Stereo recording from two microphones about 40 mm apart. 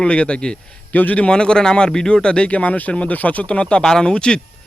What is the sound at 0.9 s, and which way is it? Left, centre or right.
Speech, left.